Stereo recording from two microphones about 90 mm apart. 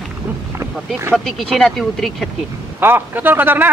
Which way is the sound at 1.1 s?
Centre (ahead or behind).